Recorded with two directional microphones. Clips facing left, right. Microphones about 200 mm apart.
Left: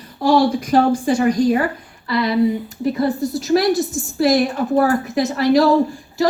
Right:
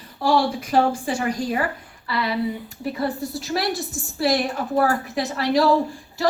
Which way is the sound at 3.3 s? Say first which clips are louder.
Left 9 dB; 40° left (ahead or behind).